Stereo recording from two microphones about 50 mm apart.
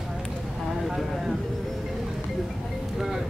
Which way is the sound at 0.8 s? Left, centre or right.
Centre.